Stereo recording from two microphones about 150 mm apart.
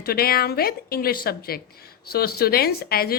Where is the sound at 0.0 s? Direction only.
90° left.